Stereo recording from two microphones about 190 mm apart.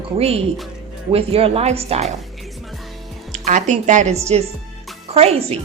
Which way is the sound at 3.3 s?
40° right (ahead or behind).